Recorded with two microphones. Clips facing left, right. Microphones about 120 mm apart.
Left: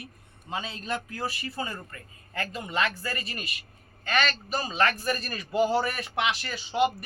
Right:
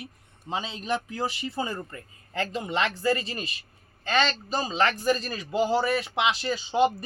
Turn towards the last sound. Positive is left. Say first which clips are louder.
# right 2 dB
turn(degrees=-25)  # may be behind; listen again after turning